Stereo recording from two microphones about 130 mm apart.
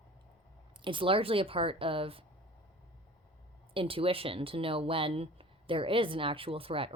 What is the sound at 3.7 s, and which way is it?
Speech, 45° right (ahead or behind).